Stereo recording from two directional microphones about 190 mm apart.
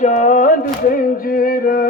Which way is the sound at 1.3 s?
50° left (ahead or behind).